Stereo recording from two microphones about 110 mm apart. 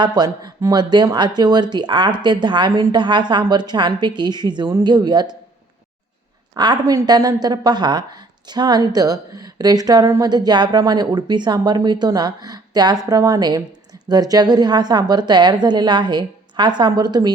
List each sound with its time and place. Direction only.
0.0 s a woman's voice: 40° right (ahead or behind)
6.5 s a woman's voice: 35° right (ahead or behind)